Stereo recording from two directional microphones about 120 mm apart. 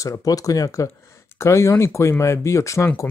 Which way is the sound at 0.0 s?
30° left (ahead or behind).